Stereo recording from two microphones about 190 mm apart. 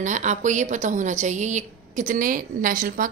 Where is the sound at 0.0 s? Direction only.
40° right (ahead or behind).